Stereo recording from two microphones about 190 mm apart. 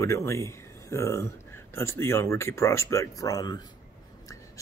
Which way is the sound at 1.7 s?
15° left (ahead or behind).